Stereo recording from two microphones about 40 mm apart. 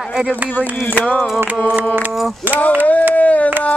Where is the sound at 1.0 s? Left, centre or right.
Left.